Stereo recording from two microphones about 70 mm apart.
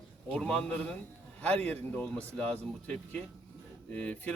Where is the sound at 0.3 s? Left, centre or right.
Centre.